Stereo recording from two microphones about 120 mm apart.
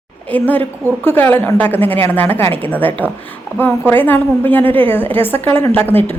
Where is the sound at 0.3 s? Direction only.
15° left (ahead or behind).